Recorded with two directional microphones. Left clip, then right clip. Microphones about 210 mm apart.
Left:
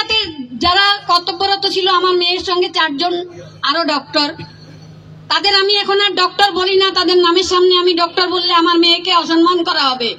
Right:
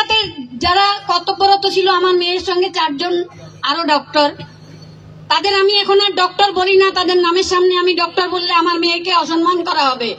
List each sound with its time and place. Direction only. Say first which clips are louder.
0.1 s child singing: right 1 dB; 35° left (ahead or behind)
1.4 s a woman's voice: right 3 dB; 30° left (ahead or behind)
5.3 s a woman's voice: even; 35° left (ahead or behind)